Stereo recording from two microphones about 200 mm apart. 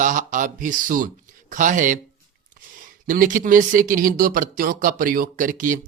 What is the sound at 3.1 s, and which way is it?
Speech, 40° right (ahead or behind).